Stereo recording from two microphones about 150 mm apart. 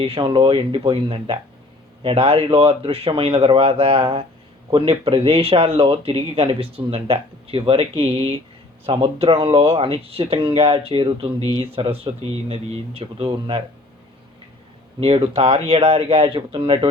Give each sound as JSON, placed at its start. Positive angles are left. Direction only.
{"t": 0.0, "sound": "speech", "side_deg": -35}
{"t": 15.0, "sound": "speech", "side_deg": -40}